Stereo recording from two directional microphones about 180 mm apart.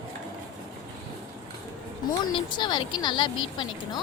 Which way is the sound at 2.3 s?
25° left (ahead or behind).